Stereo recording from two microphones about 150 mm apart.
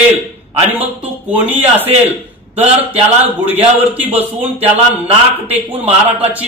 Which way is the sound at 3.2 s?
10° right (ahead or behind).